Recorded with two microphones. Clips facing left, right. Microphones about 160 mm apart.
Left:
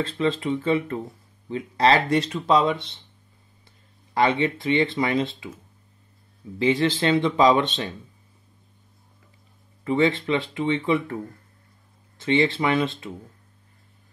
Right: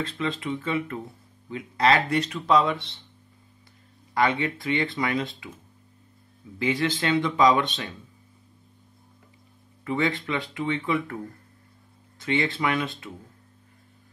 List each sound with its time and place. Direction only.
0.0 s speech: 30° left (ahead or behind)
4.1 s speech: 25° left (ahead or behind)
6.6 s speech: 30° left (ahead or behind)
9.8 s speech: 25° left (ahead or behind)
12.2 s speech: 25° left (ahead or behind)